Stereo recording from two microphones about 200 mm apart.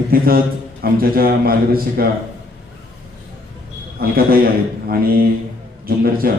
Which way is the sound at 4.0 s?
50° right (ahead or behind).